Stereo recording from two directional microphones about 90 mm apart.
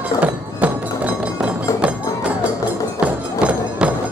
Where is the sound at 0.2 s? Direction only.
15° right (ahead or behind).